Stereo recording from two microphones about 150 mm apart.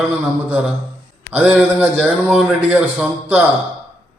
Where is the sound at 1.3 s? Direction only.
10° right (ahead or behind).